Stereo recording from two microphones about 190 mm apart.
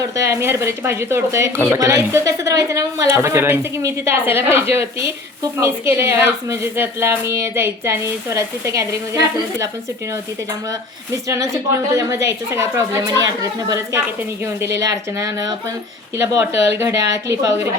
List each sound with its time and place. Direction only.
0.2 s speech: 15° right (ahead or behind)
11.3 s speech: 15° right (ahead or behind)